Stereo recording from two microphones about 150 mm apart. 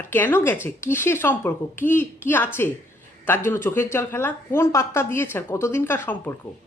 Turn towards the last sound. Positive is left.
turn(degrees=15)  # may be behind; listen again after turning